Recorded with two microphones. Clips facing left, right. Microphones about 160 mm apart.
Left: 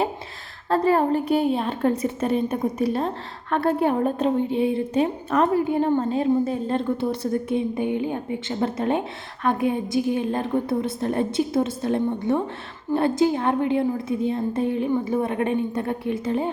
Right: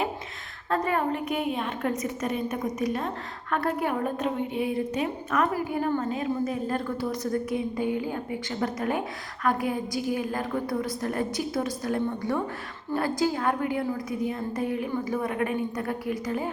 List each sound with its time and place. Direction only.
0.7 s a woman's voice: 30° left (ahead or behind)